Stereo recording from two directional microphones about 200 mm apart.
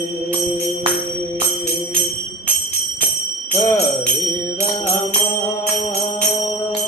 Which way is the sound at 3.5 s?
15° left (ahead or behind).